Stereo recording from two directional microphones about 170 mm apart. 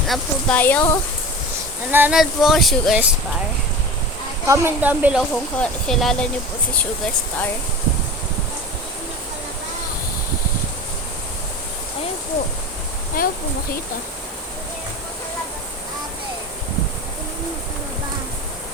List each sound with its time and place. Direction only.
0.1 s speech: 10° left (ahead or behind)
1.9 s speech: 10° right (ahead or behind)
4.4 s a woman's voice: 15° right (ahead or behind)
5.3 s speech: 5° left (ahead or behind)
13.2 s speech: 55° left (ahead or behind)